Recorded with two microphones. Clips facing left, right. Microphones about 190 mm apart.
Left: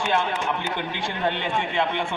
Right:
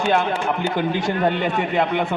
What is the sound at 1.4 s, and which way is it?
Speech, 45° right (ahead or behind).